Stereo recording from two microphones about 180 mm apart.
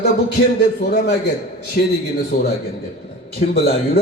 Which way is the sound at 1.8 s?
50° left (ahead or behind).